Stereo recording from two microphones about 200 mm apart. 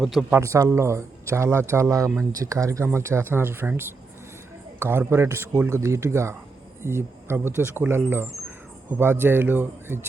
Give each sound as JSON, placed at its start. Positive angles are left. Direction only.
{"t": 0.0, "sound": "speech", "side_deg": 0}
{"t": 0.3, "sound": "speech", "side_deg": -15}